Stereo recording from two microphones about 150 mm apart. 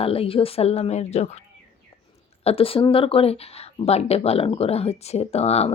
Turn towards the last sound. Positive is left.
turn(degrees=45)  # may be behind; listen again after turning